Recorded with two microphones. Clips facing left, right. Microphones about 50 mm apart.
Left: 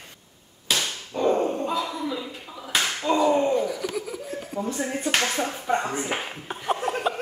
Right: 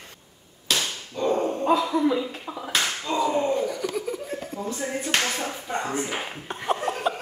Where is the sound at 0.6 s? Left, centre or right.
Centre.